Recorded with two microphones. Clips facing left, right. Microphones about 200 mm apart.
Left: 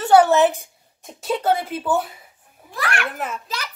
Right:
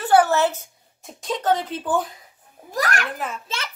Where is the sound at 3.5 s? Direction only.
25° right (ahead or behind).